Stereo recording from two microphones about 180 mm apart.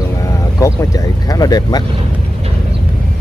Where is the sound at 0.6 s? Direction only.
20° left (ahead or behind).